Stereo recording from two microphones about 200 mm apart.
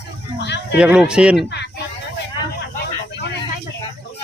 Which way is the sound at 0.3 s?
60° left (ahead or behind).